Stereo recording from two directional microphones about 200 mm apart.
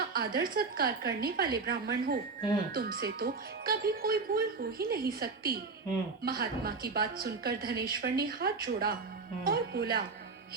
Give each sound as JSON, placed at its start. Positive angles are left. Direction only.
{"t": 0.1, "sound": "speech", "side_deg": -50}
{"t": 9.4, "sound": "music", "side_deg": -50}